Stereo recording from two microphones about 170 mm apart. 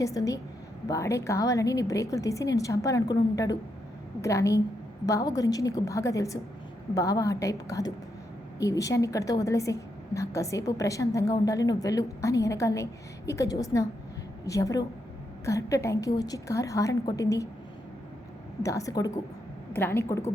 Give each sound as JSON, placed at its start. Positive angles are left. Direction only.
{"t": 0.0, "sound": "a woman's voice", "side_deg": 20}
{"t": 18.6, "sound": "a woman's voice", "side_deg": 20}